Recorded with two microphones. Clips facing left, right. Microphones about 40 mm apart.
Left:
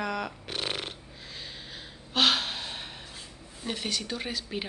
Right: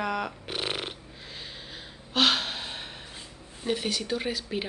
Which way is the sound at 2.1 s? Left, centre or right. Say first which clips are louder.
Right 1 dB; centre.